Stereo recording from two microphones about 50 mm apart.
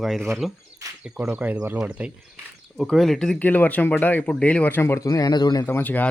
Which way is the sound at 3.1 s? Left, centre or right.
Centre.